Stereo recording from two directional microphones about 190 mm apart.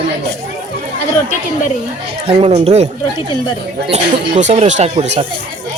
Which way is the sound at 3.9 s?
35° right (ahead or behind).